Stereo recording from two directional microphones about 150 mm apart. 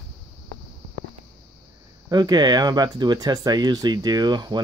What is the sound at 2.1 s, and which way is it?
Speech, 30° right (ahead or behind).